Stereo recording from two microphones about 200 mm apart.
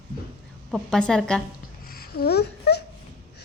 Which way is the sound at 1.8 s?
50° left (ahead or behind).